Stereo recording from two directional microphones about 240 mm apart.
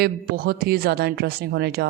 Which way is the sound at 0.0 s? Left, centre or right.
Right.